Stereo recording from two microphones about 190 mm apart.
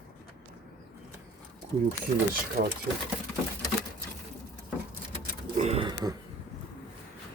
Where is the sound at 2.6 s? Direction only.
55° right (ahead or behind).